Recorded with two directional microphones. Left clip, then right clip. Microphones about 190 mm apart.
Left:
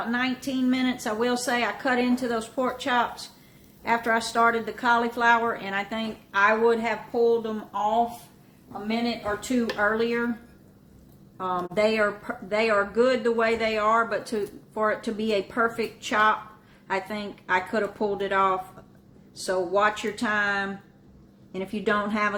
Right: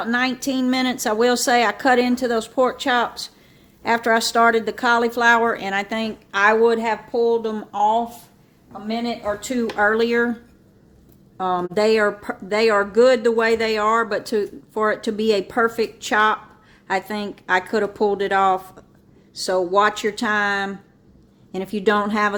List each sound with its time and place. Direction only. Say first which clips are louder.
0.0 s speech: right 6 dB; 60° right (ahead or behind)
9.7 s speech: right 8 dB; 60° right (ahead or behind)
11.3 s speech: right 5 dB; 55° right (ahead or behind)